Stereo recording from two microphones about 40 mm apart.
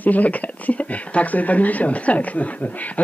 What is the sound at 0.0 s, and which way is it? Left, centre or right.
Speech, left.